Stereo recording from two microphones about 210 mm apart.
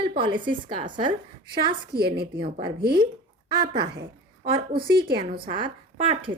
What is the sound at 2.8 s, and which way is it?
Speech, 50° right (ahead or behind).